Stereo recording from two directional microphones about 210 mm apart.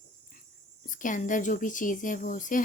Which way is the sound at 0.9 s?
40° left (ahead or behind).